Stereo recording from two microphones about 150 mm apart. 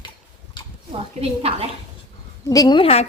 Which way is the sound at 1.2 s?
40° right (ahead or behind).